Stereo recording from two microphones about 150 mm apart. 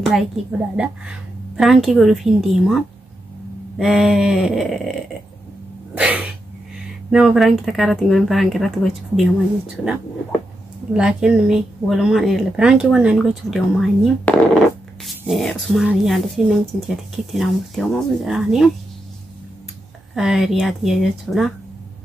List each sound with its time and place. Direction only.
0.0 s speech: centre (ahead or behind)
0.5 s a sound: 10° right (ahead or behind)
1.6 s speech: centre (ahead or behind)
5.9 s a sound: 10° right (ahead or behind)
7.1 s speech: 5° right (ahead or behind)
10.9 s speech: 5° right (ahead or behind)
20.2 s speech: centre (ahead or behind)